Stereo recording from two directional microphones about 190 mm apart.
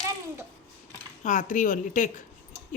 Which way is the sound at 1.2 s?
40° left (ahead or behind).